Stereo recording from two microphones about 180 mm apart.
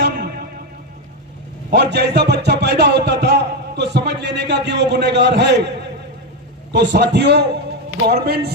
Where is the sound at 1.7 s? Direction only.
70° right (ahead or behind).